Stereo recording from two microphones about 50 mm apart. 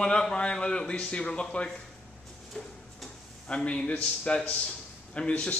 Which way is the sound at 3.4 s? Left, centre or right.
Left.